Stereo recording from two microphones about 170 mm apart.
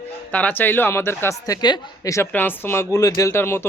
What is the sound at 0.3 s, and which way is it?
A woman's voice, 10° left (ahead or behind).